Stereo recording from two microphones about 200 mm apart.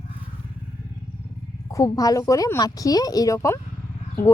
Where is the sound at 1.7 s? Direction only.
15° left (ahead or behind).